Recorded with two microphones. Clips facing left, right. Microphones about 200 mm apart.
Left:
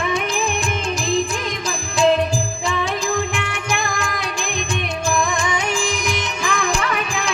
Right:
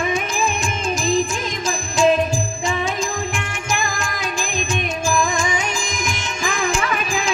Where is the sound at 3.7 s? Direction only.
60° left (ahead or behind).